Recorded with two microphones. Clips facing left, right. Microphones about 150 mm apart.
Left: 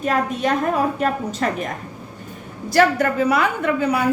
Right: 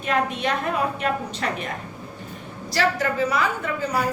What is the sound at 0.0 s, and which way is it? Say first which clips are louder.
A woman's voice: left 3 dB; 40° left (ahead or behind).